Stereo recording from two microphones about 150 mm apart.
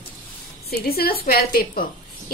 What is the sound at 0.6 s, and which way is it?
A woman's voice, 90° left.